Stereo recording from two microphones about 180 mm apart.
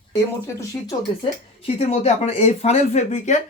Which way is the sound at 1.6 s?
35° left (ahead or behind).